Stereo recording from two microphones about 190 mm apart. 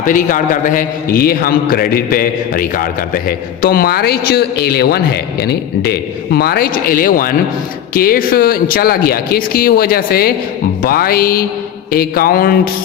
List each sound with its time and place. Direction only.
0.0 s a man's voice: 45° left (ahead or behind)